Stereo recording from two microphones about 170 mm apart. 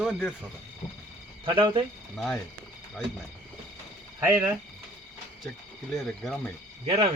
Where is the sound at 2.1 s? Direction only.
Centre (ahead or behind).